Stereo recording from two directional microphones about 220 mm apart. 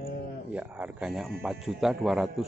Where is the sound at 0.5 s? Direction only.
5° right (ahead or behind).